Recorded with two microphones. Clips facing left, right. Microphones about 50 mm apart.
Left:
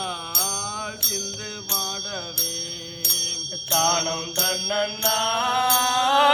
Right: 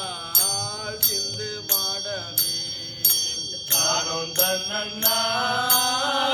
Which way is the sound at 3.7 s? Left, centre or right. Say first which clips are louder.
Left 4 dB; left.